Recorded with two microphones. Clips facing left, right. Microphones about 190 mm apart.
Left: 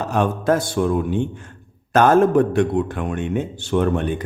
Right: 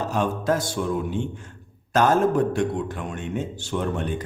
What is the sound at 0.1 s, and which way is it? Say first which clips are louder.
A man's voice: left 6 dB; 60° left (ahead or behind).